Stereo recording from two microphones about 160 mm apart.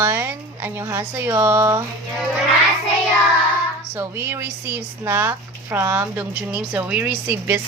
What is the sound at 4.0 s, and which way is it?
A woman's voice, 15° right (ahead or behind).